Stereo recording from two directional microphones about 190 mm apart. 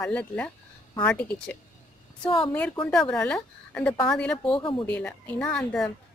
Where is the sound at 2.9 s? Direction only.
5° left (ahead or behind).